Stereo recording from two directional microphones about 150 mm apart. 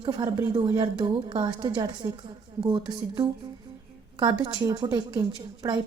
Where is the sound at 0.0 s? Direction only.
30° right (ahead or behind).